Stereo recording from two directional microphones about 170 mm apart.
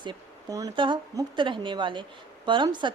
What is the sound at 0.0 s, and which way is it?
A woman's voice, 25° right (ahead or behind).